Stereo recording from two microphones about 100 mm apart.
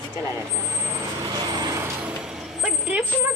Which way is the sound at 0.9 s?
40° right (ahead or behind).